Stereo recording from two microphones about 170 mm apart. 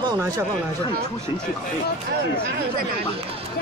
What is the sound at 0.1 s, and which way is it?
Speech, 15° right (ahead or behind).